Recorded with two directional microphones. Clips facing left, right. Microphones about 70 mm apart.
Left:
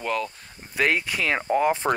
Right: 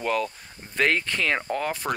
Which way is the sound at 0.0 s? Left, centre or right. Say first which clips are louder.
Right 1 dB; centre.